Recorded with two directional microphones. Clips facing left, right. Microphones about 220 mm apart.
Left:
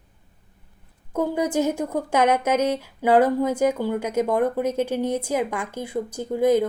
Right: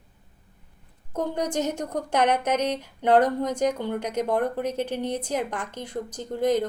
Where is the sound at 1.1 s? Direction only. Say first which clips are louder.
Left 4 dB; 10° left (ahead or behind).